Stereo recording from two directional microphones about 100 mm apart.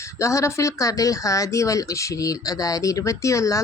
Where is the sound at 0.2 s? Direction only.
30° left (ahead or behind).